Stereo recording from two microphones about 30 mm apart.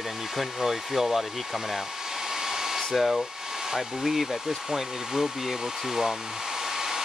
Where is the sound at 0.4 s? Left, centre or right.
Centre.